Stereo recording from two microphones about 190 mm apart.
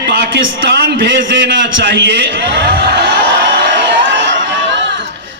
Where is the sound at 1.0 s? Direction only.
70° right (ahead or behind).